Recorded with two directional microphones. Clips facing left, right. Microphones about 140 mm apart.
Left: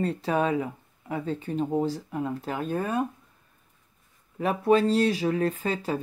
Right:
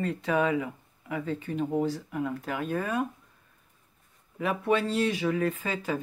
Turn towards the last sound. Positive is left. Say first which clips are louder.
# left 2 dB
turn(degrees=35)  # may be behind; listen again after turning